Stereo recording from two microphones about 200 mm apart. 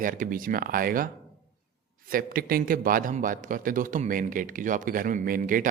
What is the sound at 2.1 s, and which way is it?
A man's voice, 45° right (ahead or behind).